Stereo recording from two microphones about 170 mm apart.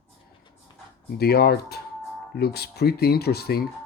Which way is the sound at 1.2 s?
65° left (ahead or behind).